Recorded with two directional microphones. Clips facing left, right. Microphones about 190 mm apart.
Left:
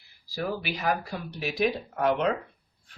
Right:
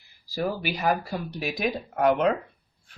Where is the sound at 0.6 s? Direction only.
45° right (ahead or behind).